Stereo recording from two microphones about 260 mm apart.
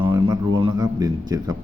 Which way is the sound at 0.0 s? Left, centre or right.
Centre.